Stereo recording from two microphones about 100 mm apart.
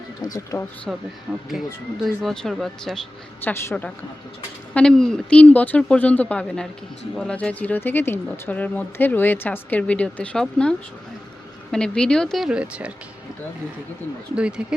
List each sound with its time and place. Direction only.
0.2 s speech: 40° left (ahead or behind)
0.9 s speech: 5° right (ahead or behind)
3.4 s a woman's voice: 20° left (ahead or behind)
4.7 s speech: 5° left (ahead or behind)
12.5 s speech: 10° right (ahead or behind)
14.3 s speech: 10° right (ahead or behind)